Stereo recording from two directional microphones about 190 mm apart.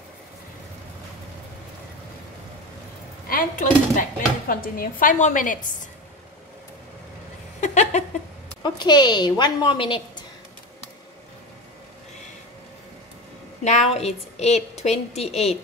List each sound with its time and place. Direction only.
3.3 s a woman's voice: 45° left (ahead or behind)
7.6 s a sound: 40° left (ahead or behind)
8.6 s a woman's voice: 20° left (ahead or behind)
13.7 s a woman's voice: 35° left (ahead or behind)